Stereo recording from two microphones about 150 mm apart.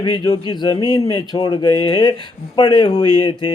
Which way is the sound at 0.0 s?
30° left (ahead or behind).